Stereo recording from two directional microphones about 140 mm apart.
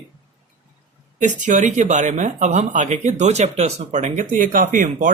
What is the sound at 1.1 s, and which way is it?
Speech, 65° right (ahead or behind).